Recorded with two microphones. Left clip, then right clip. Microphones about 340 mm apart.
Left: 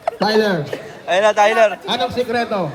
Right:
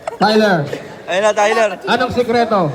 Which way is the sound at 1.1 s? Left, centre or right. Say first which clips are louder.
Even; centre.